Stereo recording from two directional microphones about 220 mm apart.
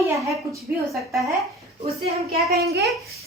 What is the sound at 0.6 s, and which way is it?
Speech, centre (ahead or behind).